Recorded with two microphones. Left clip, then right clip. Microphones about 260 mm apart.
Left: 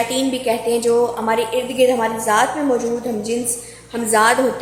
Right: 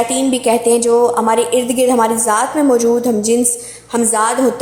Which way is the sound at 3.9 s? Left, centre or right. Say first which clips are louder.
Even; right.